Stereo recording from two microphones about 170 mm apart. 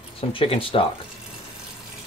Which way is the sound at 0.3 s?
30° left (ahead or behind).